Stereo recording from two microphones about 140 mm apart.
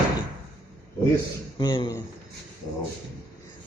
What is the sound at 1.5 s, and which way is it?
Speech, 35° left (ahead or behind).